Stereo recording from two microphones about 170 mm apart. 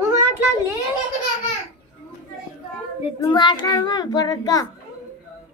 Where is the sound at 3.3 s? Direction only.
25° left (ahead or behind).